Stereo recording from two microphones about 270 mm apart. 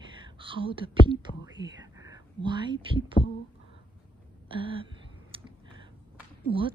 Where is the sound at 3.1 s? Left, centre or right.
Left.